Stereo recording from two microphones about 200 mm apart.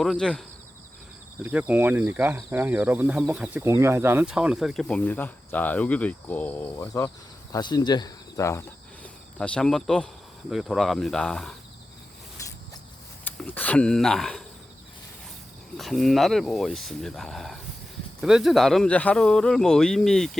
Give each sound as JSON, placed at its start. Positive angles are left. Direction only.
{"t": 0.0, "sound": "speech", "side_deg": 0}
{"t": 12.4, "sound": "a sound", "side_deg": 15}
{"t": 13.2, "sound": "speech", "side_deg": 10}
{"t": 15.8, "sound": "speech", "side_deg": 0}